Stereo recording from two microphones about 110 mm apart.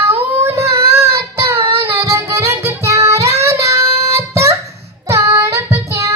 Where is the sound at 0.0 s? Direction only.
20° right (ahead or behind).